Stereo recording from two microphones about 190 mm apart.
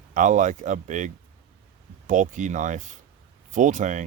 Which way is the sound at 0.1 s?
40° right (ahead or behind).